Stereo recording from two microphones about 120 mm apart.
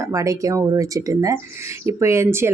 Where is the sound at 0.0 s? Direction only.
25° right (ahead or behind).